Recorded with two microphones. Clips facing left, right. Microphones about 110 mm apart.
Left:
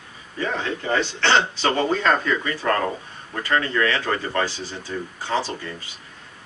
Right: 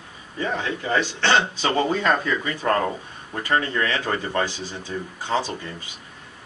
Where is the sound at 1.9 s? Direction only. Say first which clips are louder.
Left 1 dB; 25° right (ahead or behind).